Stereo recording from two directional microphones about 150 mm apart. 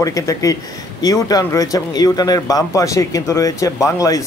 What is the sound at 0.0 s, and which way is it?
Speech, 20° left (ahead or behind).